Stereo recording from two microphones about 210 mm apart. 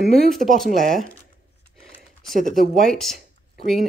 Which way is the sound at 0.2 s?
Centre (ahead or behind).